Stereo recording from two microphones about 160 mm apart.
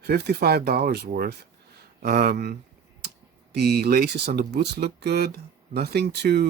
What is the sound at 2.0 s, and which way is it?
Speech, 80° right.